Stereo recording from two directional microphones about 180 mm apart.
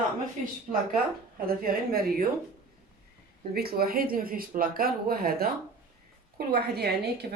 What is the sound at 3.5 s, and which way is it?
Speech, 60° right (ahead or behind).